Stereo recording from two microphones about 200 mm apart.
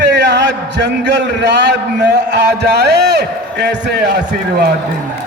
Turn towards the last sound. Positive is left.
turn(degrees=-55)  # may be behind; listen again after turning